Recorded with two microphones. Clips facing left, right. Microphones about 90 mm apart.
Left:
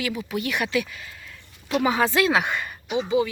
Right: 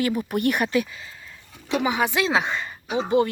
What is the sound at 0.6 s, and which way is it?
Speech, 40° right (ahead or behind).